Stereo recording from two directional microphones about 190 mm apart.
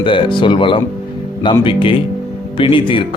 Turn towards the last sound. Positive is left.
turn(degrees=25)  # may be behind; listen again after turning